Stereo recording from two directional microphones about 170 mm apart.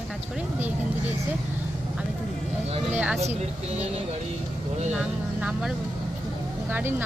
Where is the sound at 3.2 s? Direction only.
40° right (ahead or behind).